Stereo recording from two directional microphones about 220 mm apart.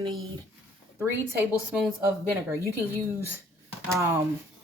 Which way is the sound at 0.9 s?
10° right (ahead or behind).